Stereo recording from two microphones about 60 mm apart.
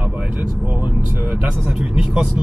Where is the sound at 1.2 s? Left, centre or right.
Centre.